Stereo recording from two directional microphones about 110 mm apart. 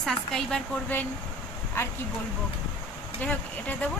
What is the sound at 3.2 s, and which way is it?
Speech, 15° left (ahead or behind).